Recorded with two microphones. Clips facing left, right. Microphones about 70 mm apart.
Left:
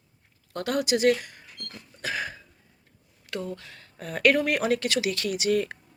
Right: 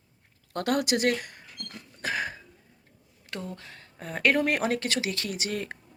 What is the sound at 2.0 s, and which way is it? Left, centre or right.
Cough, right.